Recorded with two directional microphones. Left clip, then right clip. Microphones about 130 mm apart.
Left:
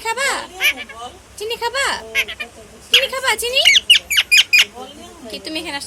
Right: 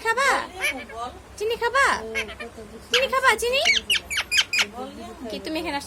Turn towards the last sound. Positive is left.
turn(degrees=-15)  # may be behind; listen again after turning